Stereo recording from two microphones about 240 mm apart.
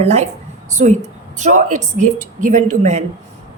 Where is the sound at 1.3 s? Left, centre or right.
Right.